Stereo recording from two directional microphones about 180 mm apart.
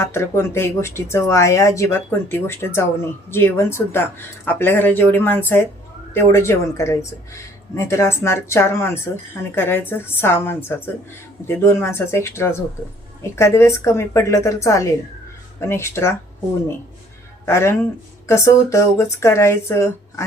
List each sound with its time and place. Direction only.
0.0 s speech: 15° left (ahead or behind)
17.4 s speech: 15° left (ahead or behind)